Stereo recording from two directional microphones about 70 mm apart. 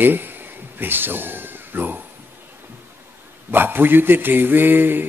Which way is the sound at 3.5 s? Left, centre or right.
Right.